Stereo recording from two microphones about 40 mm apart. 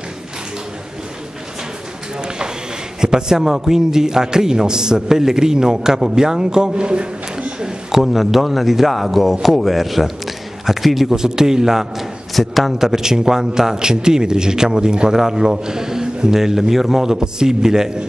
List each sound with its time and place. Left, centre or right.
2.2 s a sound: right
3.0 s a man's voice: centre
7.9 s speech: centre
12.4 s speech: centre
12.7 s a man's voice: centre